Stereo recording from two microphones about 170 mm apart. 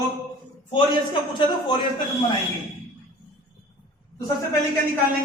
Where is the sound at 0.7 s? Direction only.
30° left (ahead or behind).